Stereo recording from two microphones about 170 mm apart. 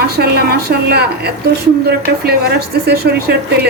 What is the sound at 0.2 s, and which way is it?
A woman's voice, 70° right (ahead or behind).